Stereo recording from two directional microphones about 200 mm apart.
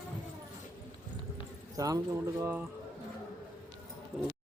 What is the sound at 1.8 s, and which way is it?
Speech, 15° right (ahead or behind).